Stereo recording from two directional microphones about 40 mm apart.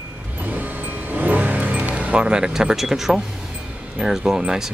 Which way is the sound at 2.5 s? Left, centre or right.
Centre.